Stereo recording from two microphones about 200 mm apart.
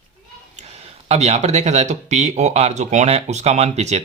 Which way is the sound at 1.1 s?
35° right (ahead or behind).